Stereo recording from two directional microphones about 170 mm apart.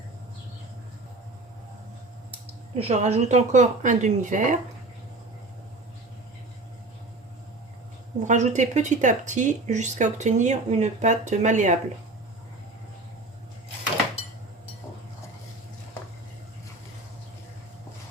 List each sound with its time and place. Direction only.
2.7 s speech: 40° right (ahead or behind)
8.3 s speech: 45° right (ahead or behind)